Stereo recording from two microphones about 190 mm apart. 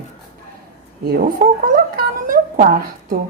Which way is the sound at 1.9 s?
45° right (ahead or behind).